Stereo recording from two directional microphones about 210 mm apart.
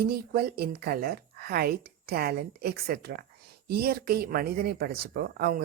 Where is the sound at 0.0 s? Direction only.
50° right (ahead or behind).